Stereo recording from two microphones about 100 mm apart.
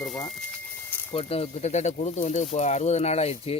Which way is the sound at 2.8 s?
90° left.